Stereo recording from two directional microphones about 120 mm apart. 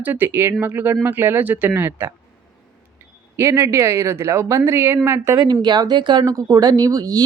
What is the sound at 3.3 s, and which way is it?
Speech, 25° right (ahead or behind).